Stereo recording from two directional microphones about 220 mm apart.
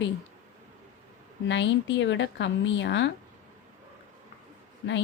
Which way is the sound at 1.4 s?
55° left (ahead or behind).